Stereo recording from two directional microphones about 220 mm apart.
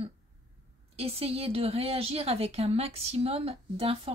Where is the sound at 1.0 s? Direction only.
25° right (ahead or behind).